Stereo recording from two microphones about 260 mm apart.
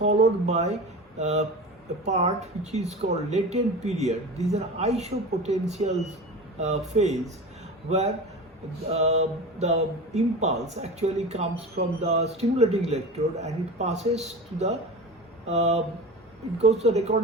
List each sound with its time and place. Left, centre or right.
0.0 s a man's voice: right